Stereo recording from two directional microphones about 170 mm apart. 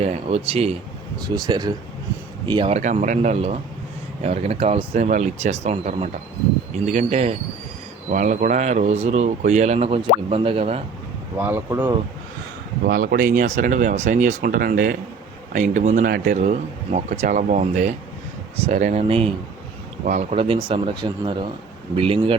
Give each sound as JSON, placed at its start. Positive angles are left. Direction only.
{"t": 0.0, "sound": "speech", "side_deg": -40}
{"t": 1.2, "sound": "speech", "side_deg": -25}
{"t": 11.3, "sound": "speech", "side_deg": -10}
{"t": 12.8, "sound": "speech", "side_deg": -60}